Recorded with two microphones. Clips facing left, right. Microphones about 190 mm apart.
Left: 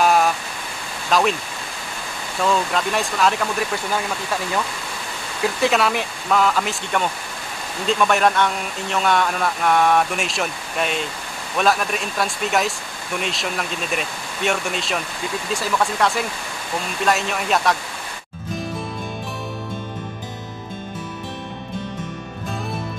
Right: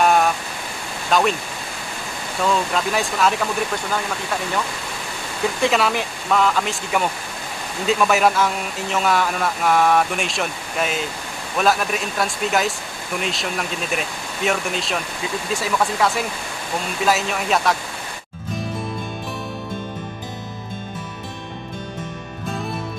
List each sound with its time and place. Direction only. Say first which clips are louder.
0.0 s pink noise: even; centre (ahead or behind)
1.1 s speech: even; centre (ahead or behind)
2.4 s speech: even; centre (ahead or behind)
5.4 s speech: even; centre (ahead or behind)